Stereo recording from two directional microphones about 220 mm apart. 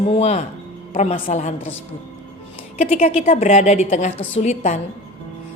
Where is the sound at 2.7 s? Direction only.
35° left (ahead or behind).